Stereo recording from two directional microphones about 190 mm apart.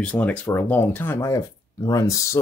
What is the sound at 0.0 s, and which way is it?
Speech, 5° left (ahead or behind).